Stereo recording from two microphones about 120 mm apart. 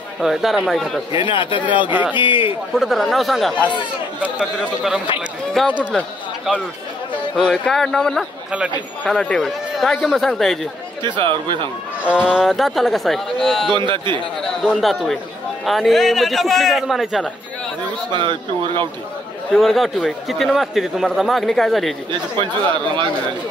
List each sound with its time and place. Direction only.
0.2 s a man's voice: centre (ahead or behind)
1.1 s speech: 45° left (ahead or behind)
1.9 s a man's voice: 15° right (ahead or behind)
2.1 s speech: 45° left (ahead or behind)
2.7 s a man's voice: centre (ahead or behind)
8.5 s a man's voice: 5° right (ahead or behind)
11.0 s speech: 40° right (ahead or behind)
12.0 s a man's voice: 10° right (ahead or behind)
13.7 s a man's voice: 40° right (ahead or behind)
14.6 s a man's voice: centre (ahead or behind)
18.1 s speech: 40° right (ahead or behind)
19.5 s a man's voice: centre (ahead or behind)